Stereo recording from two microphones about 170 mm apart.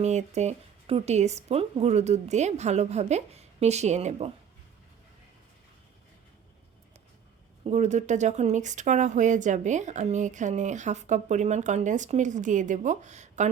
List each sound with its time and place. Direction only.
0.0 s speech: 40° right (ahead or behind)
7.6 s speech: 40° right (ahead or behind)